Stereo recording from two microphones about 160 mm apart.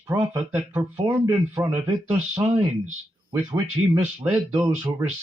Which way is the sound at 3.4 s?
30° right (ahead or behind).